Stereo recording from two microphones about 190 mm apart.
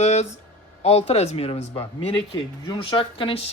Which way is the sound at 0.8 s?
35° left (ahead or behind).